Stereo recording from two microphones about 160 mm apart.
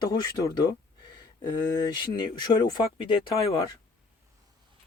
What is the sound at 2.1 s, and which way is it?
Speech, 25° left (ahead or behind).